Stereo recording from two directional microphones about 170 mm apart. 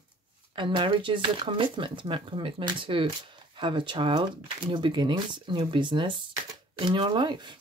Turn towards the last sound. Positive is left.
turn(degrees=-25)  # may be behind; listen again after turning